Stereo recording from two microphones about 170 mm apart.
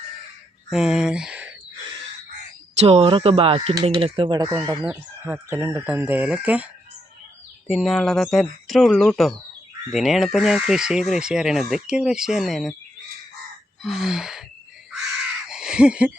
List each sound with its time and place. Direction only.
0.7 s speech: 5° right (ahead or behind)
2.8 s speech: 35° right (ahead or behind); by 6.7 s 10° right (ahead or behind)
7.7 s speech: centre (ahead or behind)
13.8 s speech: centre (ahead or behind)
15.4 s a sound: 5° right (ahead or behind)